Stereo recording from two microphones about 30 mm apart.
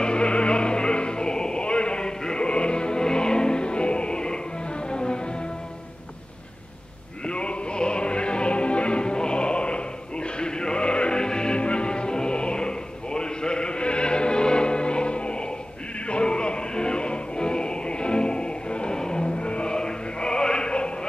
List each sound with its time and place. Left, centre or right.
0.0 s music: left
7.2 s music: left